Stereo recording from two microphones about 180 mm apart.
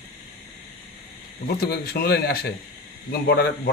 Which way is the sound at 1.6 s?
60° left (ahead or behind).